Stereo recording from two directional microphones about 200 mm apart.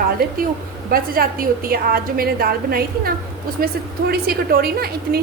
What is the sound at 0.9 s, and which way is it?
A woman's voice, 50° right (ahead or behind).